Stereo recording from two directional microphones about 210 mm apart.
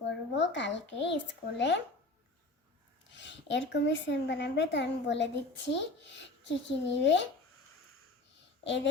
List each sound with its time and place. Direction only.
0.3 s speech: 60° left (ahead or behind)
3.1 s speech: 60° left (ahead or behind)
8.6 s a child's voice: 60° left (ahead or behind)